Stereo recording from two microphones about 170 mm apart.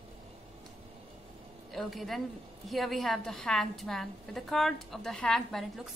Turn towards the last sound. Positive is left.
turn(degrees=0)  # may be behind; listen again after turning